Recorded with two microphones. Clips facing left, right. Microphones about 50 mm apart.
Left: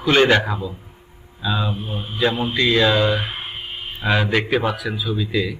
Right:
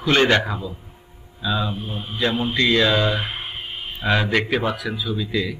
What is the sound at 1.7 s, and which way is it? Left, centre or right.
Speech, left.